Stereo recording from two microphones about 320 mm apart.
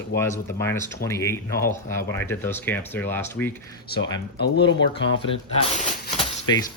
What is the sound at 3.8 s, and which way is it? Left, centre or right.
Speech, left.